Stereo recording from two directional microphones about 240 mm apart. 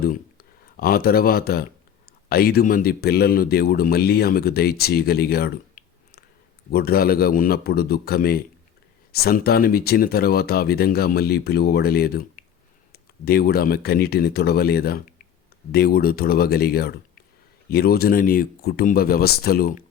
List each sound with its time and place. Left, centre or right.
0.0 s a man's voice: left